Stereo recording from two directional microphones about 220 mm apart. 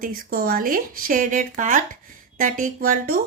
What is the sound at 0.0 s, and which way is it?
Speech, 40° right (ahead or behind).